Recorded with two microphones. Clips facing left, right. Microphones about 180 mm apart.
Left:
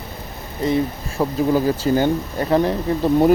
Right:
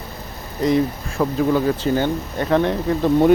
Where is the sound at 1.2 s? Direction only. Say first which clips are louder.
Even; 15° left (ahead or behind).